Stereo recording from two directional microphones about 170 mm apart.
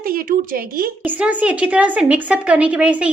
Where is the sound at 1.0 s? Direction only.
10° right (ahead or behind).